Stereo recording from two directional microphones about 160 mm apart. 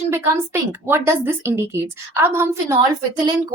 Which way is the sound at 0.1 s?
15° right (ahead or behind).